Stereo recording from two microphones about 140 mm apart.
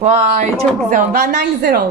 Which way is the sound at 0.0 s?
55° right (ahead or behind).